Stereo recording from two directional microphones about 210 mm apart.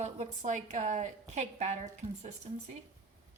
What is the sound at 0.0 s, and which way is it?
A woman's voice, 35° right (ahead or behind).